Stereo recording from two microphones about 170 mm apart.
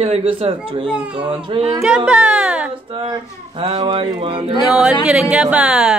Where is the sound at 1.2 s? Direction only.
30° right (ahead or behind).